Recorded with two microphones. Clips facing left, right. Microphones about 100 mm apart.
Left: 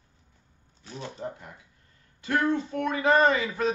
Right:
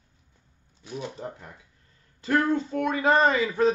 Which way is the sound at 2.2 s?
35° right (ahead or behind).